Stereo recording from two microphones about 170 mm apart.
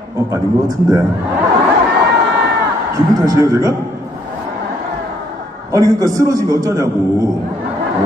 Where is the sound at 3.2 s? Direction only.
20° right (ahead or behind).